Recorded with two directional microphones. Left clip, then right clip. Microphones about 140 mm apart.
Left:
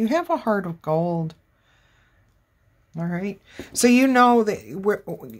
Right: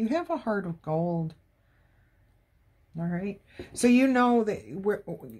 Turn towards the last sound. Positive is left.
turn(degrees=25)  # may be behind; listen again after turning